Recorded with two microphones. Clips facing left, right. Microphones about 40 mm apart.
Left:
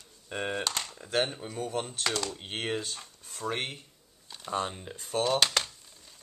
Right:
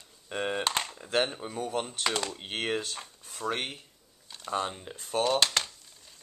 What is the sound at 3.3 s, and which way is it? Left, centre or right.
Speech, centre.